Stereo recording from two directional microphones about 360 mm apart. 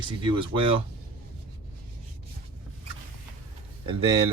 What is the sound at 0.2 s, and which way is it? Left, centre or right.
Speech, centre.